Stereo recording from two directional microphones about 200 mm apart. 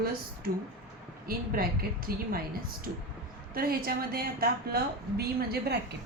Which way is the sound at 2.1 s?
50° right (ahead or behind).